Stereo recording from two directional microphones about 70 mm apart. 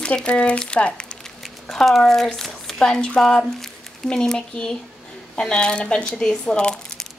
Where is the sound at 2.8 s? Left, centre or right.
Centre.